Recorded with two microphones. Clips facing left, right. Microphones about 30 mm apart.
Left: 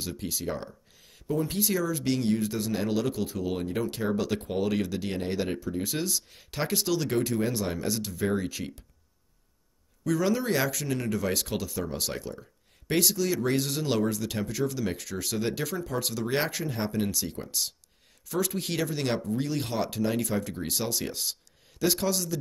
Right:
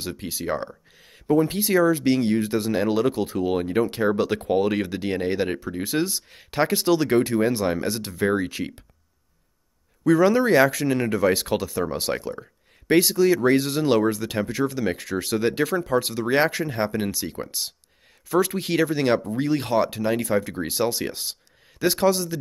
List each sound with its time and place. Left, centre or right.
0.3 s speech: right
0.9 s speech: right
1.2 s speech: right
2.3 s speech: right
2.7 s speech: right
10.0 s speech: right